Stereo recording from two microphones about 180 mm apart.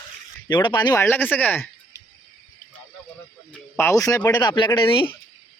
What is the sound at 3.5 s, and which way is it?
Speech, 15° left (ahead or behind).